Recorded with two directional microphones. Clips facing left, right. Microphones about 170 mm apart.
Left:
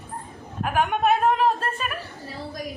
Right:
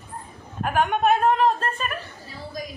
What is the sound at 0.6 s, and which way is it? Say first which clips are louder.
A woman's voice: right 1 dB; centre (ahead or behind).